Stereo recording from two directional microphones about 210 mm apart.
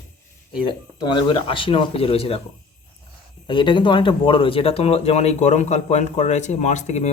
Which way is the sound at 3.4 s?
20° left (ahead or behind).